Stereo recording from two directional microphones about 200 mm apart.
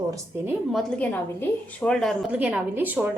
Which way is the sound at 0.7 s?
Centre (ahead or behind).